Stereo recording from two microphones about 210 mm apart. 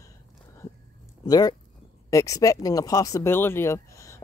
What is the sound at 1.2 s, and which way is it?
Speech, 20° left (ahead or behind).